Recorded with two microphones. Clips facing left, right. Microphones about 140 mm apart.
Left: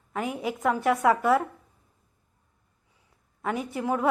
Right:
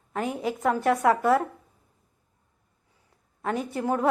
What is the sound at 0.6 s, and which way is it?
Speech, 35° right (ahead or behind).